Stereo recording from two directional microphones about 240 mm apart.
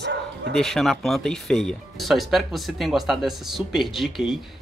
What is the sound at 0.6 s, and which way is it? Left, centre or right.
Speech, centre.